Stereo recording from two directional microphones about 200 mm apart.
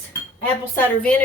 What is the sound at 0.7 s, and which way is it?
Speech, 10° left (ahead or behind).